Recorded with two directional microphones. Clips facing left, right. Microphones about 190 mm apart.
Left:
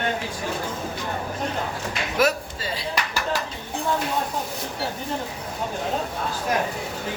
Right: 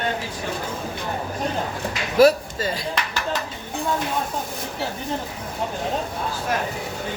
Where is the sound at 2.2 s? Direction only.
40° right (ahead or behind).